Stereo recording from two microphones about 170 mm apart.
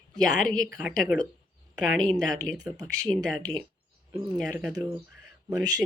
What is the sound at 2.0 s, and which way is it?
Speech, 55° left (ahead or behind).